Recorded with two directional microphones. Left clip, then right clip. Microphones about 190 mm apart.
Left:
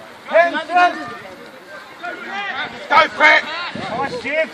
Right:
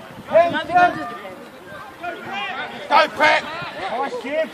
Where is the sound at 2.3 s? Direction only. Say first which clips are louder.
Left 3 dB; 50° right (ahead or behind).